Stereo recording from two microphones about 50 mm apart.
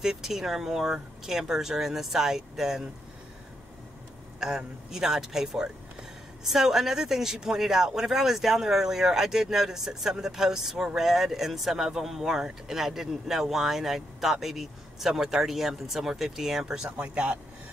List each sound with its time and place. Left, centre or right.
0.0 s speech: centre
4.4 s speech: centre
17.0 s speech: right